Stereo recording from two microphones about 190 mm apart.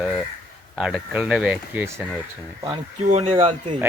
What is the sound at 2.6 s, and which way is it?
Speech, 35° right (ahead or behind).